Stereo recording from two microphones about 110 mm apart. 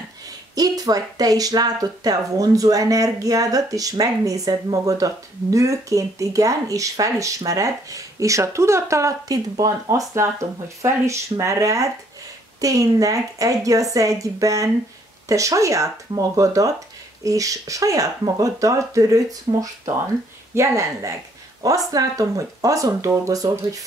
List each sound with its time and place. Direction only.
0.6 s speech: 35° right (ahead or behind)